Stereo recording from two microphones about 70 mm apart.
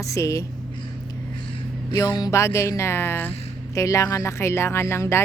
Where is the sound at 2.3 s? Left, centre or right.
Left.